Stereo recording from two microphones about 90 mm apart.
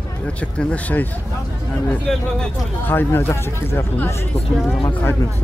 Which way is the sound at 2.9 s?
25° left (ahead or behind).